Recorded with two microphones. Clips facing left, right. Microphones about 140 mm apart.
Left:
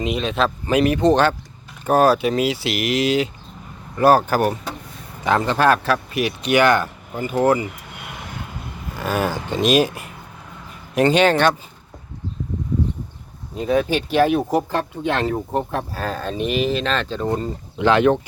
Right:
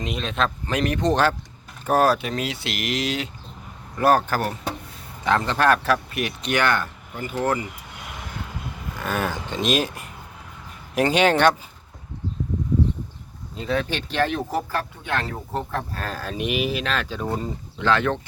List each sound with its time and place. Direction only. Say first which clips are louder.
0.0 s speech: left 5 dB; 5° left (ahead or behind)
4.3 s speech: left 6 dB; 15° left (ahead or behind)
9.0 s speech: left 4 dB; 5° left (ahead or behind)
10.9 s speech: left 3 dB; 10° right (ahead or behind)
13.6 s speech: left 6 dB; 15° left (ahead or behind)
14.7 s speech: left 5 dB; 25° left (ahead or behind)
16.0 s speech: left 5 dB; centre (ahead or behind)
17.7 s speech: left 6 dB; 15° left (ahead or behind)